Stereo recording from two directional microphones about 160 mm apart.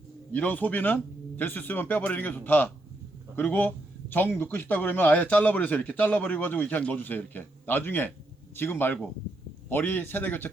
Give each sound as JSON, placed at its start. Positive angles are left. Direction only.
{"t": 0.3, "sound": "a man's voice", "side_deg": 10}